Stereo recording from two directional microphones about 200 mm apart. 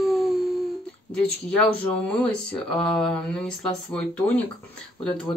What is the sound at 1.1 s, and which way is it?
Speech, 5° left (ahead or behind).